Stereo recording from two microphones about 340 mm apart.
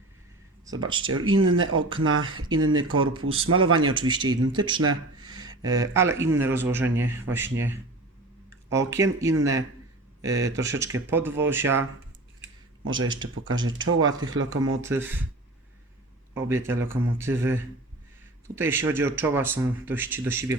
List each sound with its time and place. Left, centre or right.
0.6 s speech: centre
1.0 s speech: right
3.2 s speech: centre
3.5 s speech: right
3.9 s speech: centre
12.8 s speech: right
14.8 s speech: centre
16.3 s speech: centre